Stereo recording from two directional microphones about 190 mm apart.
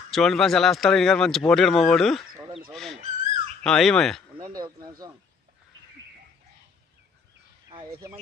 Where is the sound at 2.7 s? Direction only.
Centre (ahead or behind).